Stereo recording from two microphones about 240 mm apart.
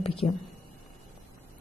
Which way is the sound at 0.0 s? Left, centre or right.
Left.